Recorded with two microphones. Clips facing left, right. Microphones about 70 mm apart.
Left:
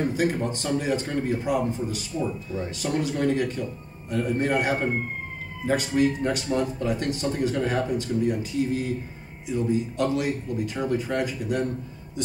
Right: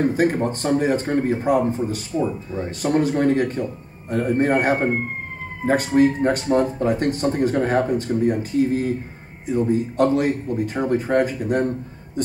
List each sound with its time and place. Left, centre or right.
0.0 s speech: right